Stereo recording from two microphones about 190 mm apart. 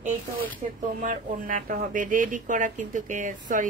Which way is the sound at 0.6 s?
35° right (ahead or behind).